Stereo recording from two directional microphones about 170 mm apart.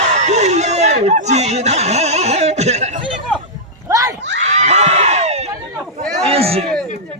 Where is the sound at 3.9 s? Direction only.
20° right (ahead or behind).